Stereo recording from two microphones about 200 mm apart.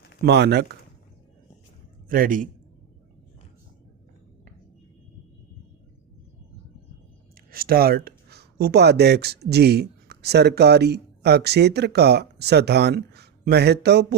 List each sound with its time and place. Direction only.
0.3 s speech: 55° right (ahead or behind)
2.0 s a man's voice: 45° right (ahead or behind)
7.5 s speech: 50° right (ahead or behind)